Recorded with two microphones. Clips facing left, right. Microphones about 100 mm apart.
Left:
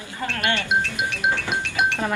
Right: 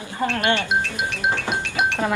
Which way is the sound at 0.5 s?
Centre (ahead or behind).